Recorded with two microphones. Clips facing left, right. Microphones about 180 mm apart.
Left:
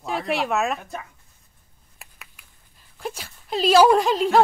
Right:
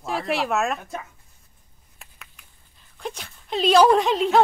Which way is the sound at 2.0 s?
5° left (ahead or behind).